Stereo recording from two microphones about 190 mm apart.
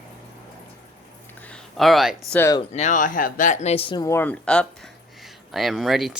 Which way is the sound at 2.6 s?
35° left (ahead or behind).